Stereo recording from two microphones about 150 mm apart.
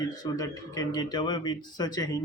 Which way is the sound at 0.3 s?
25° left (ahead or behind).